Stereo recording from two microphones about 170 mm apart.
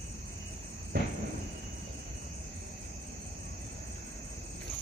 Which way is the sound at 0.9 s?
65° right (ahead or behind).